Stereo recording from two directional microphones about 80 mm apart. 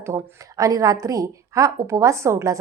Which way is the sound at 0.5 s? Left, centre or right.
Right.